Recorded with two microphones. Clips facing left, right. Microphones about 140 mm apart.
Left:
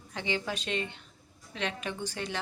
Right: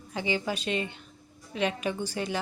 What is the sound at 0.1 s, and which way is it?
Speech, 5° right (ahead or behind).